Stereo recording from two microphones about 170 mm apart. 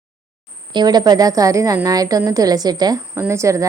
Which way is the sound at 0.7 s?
25° right (ahead or behind).